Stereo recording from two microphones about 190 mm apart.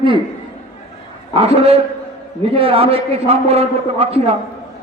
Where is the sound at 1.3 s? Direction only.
30° right (ahead or behind).